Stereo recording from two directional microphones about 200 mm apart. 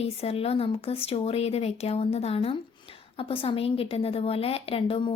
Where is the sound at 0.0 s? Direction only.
30° left (ahead or behind).